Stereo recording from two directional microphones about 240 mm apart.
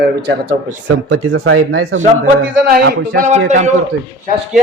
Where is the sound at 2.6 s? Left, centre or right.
Right.